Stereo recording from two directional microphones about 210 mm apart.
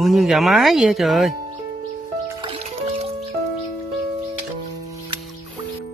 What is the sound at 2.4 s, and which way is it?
Music, 30° right (ahead or behind).